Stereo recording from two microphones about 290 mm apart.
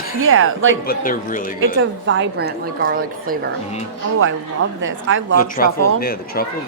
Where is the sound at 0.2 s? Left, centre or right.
Right.